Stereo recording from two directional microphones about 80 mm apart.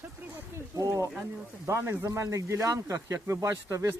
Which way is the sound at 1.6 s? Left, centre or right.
Right.